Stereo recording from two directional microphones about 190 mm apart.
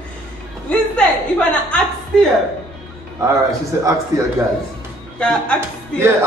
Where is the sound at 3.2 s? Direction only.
15° right (ahead or behind).